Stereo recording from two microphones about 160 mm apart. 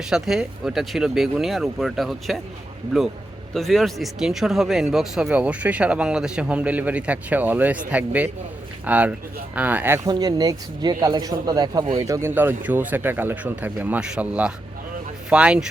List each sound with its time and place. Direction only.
0.1 s a man's voice: 5° right (ahead or behind)